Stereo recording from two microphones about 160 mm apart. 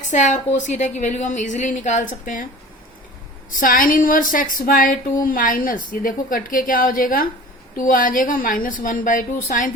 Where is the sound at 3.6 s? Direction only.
60° left (ahead or behind).